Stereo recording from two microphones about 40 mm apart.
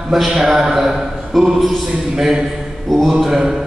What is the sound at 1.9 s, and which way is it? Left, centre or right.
A man's voice, centre.